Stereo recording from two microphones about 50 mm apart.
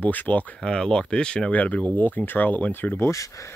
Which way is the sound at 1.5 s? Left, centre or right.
Left.